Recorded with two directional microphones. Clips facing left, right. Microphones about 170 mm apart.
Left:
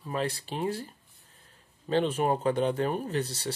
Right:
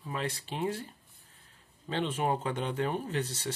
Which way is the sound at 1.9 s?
40° left (ahead or behind).